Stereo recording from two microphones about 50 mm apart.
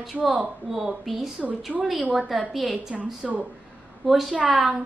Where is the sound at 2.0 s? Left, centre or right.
Right.